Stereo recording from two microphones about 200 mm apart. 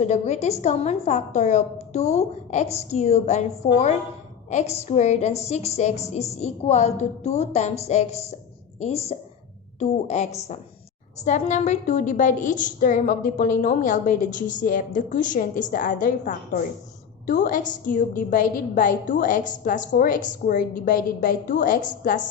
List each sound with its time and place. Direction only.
0.0 s a woman's voice: 35° left (ahead or behind)